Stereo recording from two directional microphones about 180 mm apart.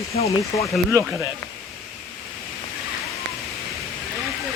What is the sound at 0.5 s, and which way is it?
Speech, 20° left (ahead or behind).